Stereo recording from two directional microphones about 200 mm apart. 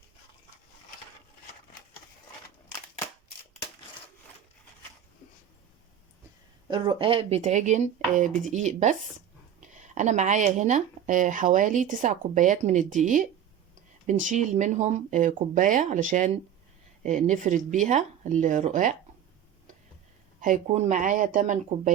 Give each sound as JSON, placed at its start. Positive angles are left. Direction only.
{"t": 6.7, "sound": "speech", "side_deg": -25}
{"t": 20.4, "sound": "speech", "side_deg": -40}